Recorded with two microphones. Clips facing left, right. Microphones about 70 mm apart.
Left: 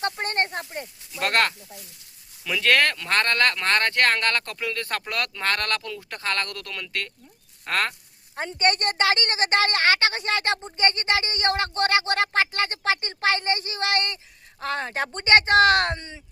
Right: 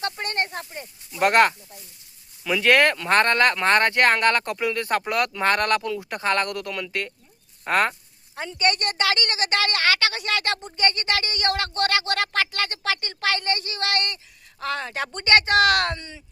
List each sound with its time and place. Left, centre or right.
0.0 s snake: left
1.1 s speech: centre
8.4 s a woman's voice: left